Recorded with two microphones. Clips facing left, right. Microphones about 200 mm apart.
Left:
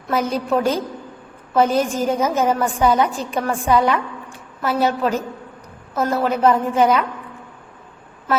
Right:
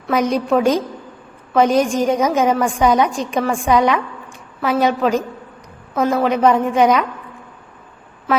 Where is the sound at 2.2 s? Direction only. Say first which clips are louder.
Right 3 dB; 15° right (ahead or behind).